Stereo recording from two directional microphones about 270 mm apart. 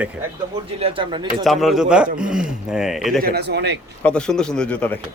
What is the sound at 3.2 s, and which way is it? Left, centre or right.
Speech, right.